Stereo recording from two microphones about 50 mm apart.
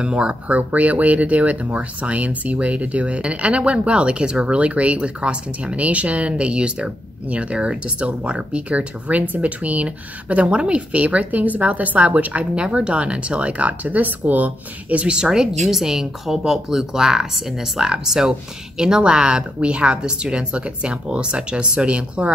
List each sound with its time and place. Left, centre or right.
0.0 s speech: right
15.1 s speech: centre